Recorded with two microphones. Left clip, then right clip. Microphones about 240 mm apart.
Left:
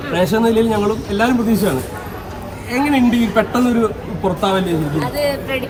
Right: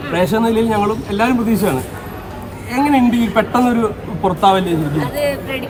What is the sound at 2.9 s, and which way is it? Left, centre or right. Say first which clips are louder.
Speech: even; right.